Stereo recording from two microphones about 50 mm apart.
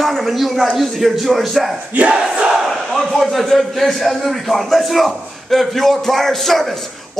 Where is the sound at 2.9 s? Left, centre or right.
Centre.